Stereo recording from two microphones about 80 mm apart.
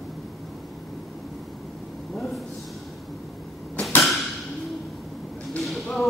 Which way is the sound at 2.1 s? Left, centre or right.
Centre.